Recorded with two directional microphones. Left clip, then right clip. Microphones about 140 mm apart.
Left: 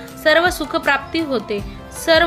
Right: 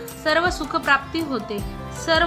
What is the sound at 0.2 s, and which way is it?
A woman's voice, 35° left (ahead or behind).